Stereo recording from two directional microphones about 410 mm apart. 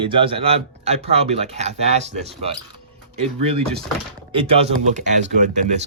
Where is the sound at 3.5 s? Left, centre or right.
Centre.